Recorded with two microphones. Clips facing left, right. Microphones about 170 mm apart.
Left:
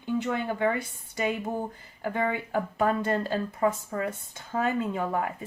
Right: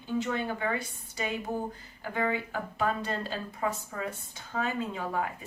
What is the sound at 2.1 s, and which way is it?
Speech, 55° left (ahead or behind).